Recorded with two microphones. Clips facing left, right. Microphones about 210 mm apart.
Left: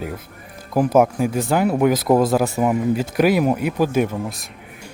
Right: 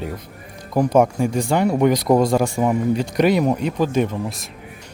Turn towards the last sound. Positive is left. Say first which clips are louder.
# even
turn(degrees=0)  # may be behind; listen again after turning